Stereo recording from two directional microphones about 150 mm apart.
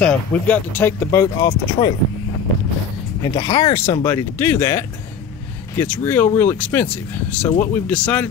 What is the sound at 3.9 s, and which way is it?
Speech, 20° left (ahead or behind).